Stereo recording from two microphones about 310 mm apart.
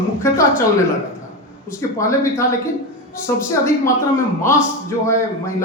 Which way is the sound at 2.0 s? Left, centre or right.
Centre.